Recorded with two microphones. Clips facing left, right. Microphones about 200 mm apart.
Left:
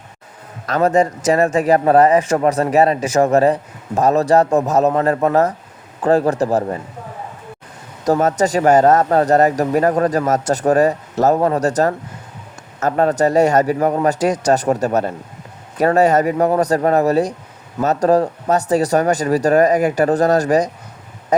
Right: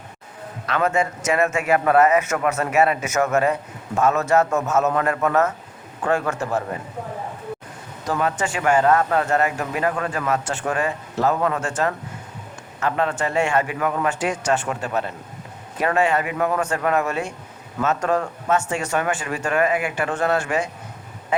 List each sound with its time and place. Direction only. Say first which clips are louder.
0.7 s a man's voice: left 6 dB; 35° left (ahead or behind)
8.0 s a man's voice: left 8 dB; 40° left (ahead or behind)